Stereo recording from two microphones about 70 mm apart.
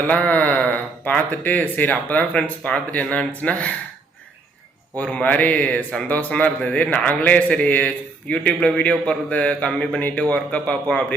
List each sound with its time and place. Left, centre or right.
0.1 s speech: left
4.9 s speech: centre
8.4 s a man's voice: centre